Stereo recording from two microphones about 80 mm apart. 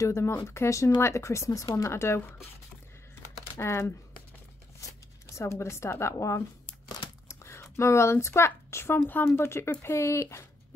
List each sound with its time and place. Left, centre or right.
0.0 s speech: left
3.5 s speech: left
5.3 s speech: left
7.2 s typing: left
7.7 s speech: left